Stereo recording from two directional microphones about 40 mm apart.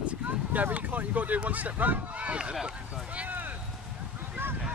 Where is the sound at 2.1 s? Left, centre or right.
Right.